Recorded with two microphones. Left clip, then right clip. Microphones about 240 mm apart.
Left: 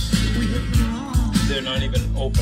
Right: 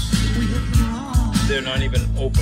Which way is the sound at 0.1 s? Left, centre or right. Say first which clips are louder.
Even; centre.